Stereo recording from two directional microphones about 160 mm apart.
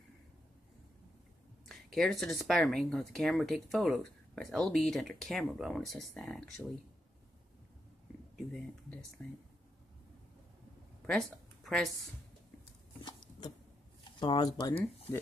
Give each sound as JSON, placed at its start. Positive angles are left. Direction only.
{"t": 1.7, "sound": "speech", "side_deg": 0}
{"t": 9.2, "sound": "speech", "side_deg": 5}
{"t": 11.1, "sound": "speech", "side_deg": 5}
{"t": 14.2, "sound": "speech", "side_deg": 25}